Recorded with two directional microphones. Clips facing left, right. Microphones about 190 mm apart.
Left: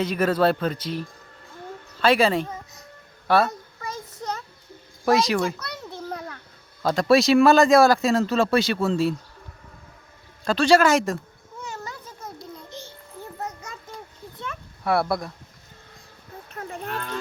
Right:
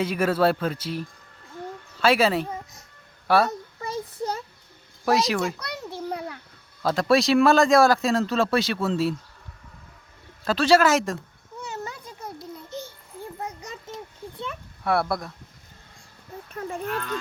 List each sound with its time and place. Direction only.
0.0 s speech: 10° right (ahead or behind)
3.8 s child singing: 30° right (ahead or behind)
5.0 s speech: centre (ahead or behind)
5.5 s a sound: 10° right (ahead or behind)
6.8 s speech: centre (ahead or behind)
10.4 s speech: 5° right (ahead or behind)
11.7 s a sound: 15° right (ahead or behind)
14.8 s speech: centre (ahead or behind)